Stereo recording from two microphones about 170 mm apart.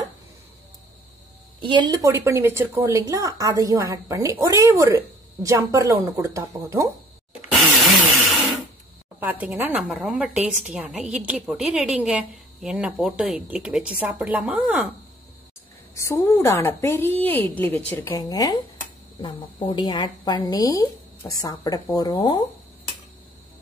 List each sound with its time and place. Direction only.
1.6 s speech: 30° right (ahead or behind)
9.2 s a woman's voice: 10° right (ahead or behind)
15.9 s a woman's voice: 15° left (ahead or behind)